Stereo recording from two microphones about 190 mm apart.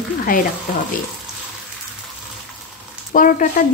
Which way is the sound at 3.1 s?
45° left (ahead or behind).